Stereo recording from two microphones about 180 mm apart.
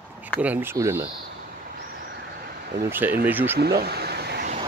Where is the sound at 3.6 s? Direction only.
65° right (ahead or behind).